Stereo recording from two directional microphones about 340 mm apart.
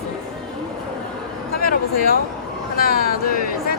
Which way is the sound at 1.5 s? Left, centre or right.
Left.